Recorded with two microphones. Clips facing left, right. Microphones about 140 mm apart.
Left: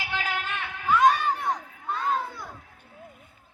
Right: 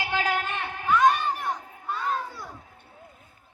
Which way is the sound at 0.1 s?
35° right (ahead or behind).